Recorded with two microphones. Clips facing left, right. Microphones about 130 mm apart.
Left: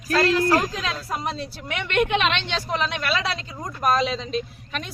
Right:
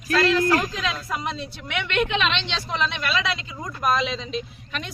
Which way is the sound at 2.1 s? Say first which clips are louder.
Left 2 dB; 55° left (ahead or behind).